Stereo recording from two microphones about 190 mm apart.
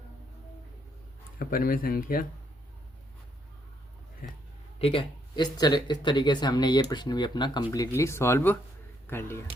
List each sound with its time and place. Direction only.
1.4 s speech: 50° left (ahead or behind)
4.8 s speech: 30° left (ahead or behind); by 9.4 s 10° left (ahead or behind)